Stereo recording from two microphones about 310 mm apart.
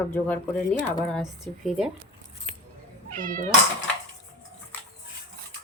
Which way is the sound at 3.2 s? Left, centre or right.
Right.